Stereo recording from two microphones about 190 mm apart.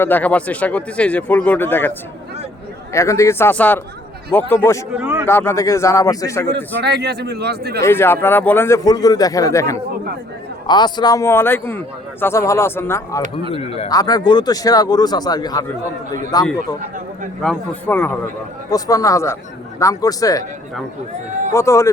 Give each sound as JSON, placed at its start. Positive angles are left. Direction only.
{"t": 0.0, "sound": "a man's voice", "side_deg": 10}
{"t": 2.9, "sound": "a man's voice", "side_deg": 15}
{"t": 4.9, "sound": "speech", "side_deg": -10}
{"t": 5.2, "sound": "a man's voice", "side_deg": 15}
{"t": 6.8, "sound": "a man's voice", "side_deg": -60}
{"t": 7.8, "sound": "a man's voice", "side_deg": 10}
{"t": 13.5, "sound": "speech", "side_deg": 30}
{"t": 13.9, "sound": "speech", "side_deg": 20}
{"t": 17.4, "sound": "a man's voice", "side_deg": 5}
{"t": 21.5, "sound": "a man's voice", "side_deg": 15}